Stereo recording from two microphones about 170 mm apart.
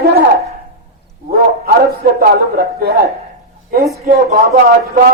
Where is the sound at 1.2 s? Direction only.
65° right (ahead or behind).